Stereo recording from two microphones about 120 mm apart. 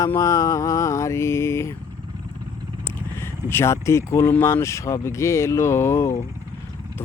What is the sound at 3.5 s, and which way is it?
Speech, 25° left (ahead or behind).